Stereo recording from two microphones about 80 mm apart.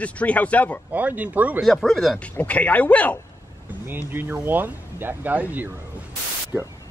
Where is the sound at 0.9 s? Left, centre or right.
Centre.